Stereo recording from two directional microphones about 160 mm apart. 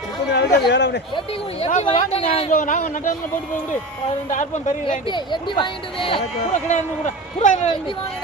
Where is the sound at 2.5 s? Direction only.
55° left (ahead or behind).